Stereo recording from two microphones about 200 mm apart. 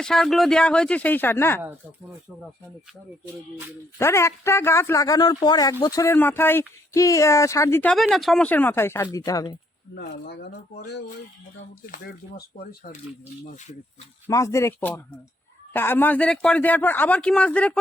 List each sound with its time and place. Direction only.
0.0 s speech: centre (ahead or behind)
3.9 s speech: 15° left (ahead or behind)
9.9 s speech: 55° left (ahead or behind)
12.5 s speech: 45° left (ahead or behind)
14.3 s speech: 15° left (ahead or behind)